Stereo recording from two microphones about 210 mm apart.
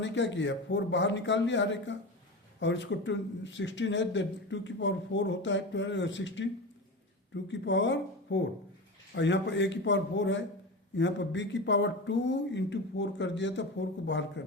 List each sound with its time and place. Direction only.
0.0 s speech: 60° left (ahead or behind)